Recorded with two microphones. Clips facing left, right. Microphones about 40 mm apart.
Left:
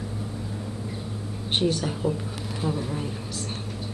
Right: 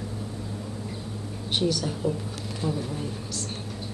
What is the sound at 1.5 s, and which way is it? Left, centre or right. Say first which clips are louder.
A woman's voice: left 1 dB; left.